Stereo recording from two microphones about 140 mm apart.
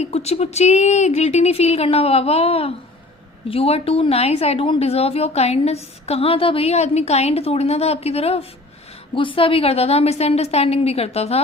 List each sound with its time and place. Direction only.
0.0 s a woman's voice: 50° left (ahead or behind)